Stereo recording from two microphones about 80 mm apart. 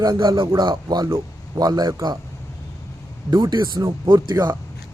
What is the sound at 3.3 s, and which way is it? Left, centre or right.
Speech, right.